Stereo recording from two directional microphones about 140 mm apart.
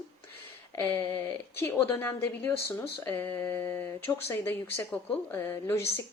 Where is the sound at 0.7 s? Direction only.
15° left (ahead or behind).